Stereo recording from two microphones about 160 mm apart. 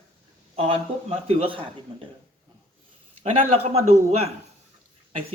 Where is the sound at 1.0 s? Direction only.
35° right (ahead or behind).